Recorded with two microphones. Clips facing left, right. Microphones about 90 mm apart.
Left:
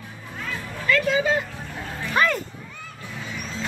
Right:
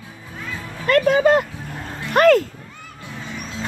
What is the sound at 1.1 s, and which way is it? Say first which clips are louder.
Speech: right 7 dB; 55° right (ahead or behind).